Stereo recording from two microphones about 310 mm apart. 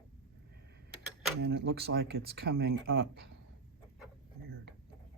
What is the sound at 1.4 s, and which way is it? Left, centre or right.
Speech, right.